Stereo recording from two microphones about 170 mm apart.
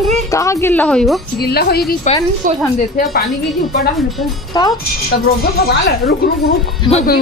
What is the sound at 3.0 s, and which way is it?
Speech, 65° left (ahead or behind).